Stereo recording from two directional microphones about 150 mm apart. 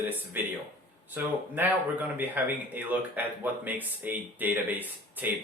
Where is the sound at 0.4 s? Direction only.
10° right (ahead or behind).